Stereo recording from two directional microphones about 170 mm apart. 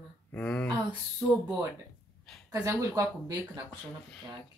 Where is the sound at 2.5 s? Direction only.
15° right (ahead or behind).